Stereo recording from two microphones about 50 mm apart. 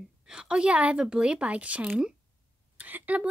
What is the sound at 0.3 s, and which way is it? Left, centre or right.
A child's voice, centre.